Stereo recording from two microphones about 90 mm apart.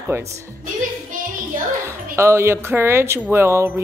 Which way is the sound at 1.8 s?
30° right (ahead or behind).